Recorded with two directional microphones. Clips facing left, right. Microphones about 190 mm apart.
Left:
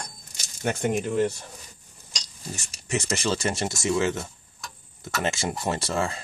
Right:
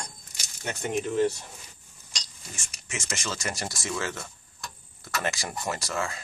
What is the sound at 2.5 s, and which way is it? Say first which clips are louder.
Speech: left 10 dB; 35° left (ahead or behind).